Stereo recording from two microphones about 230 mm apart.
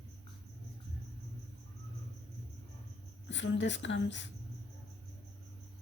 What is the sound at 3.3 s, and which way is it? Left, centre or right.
Speech, left.